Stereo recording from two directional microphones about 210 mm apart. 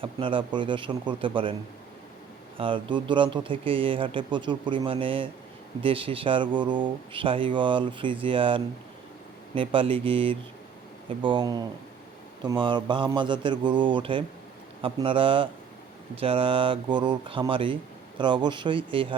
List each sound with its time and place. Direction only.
0.0 s speech: 25° right (ahead or behind)
2.6 s speech: 25° right (ahead or behind)